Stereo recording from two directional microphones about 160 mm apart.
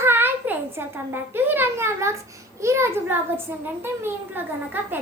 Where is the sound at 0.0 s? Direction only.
15° right (ahead or behind).